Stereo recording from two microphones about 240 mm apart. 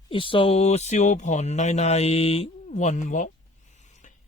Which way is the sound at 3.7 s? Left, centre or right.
Left.